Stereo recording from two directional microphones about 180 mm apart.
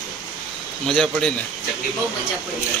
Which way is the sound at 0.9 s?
5° left (ahead or behind).